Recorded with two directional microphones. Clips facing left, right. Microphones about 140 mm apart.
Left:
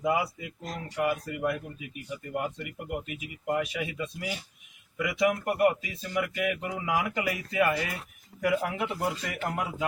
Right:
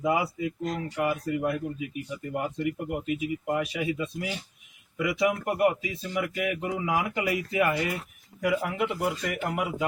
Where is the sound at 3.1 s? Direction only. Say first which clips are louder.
Right 4 dB; 25° right (ahead or behind).